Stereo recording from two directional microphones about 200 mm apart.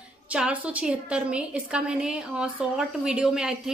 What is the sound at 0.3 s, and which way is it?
A woman's voice, 5° right (ahead or behind).